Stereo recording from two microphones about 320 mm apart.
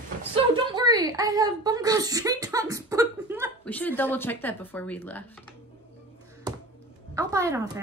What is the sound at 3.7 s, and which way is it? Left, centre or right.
Speech, centre.